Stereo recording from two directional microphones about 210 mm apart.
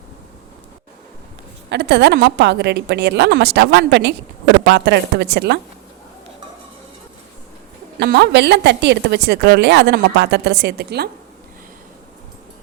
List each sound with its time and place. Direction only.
1.7 s a woman's voice: 55° right (ahead or behind)
7.9 s a woman's voice: 50° right (ahead or behind)